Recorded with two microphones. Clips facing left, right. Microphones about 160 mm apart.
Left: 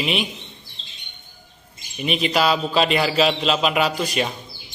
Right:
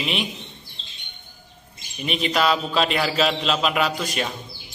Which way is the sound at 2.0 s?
5° left (ahead or behind).